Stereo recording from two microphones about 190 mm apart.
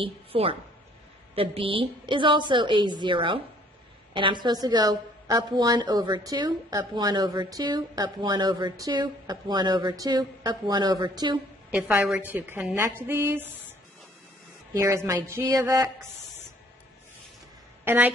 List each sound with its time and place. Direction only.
0.0 s a woman's voice: 30° right (ahead or behind)
11.7 s speech: 10° right (ahead or behind)
14.7 s speech: 15° right (ahead or behind)
17.8 s a woman's voice: 10° right (ahead or behind)